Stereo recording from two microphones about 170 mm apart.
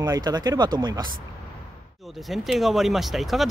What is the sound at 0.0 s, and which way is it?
Speech, 25° right (ahead or behind).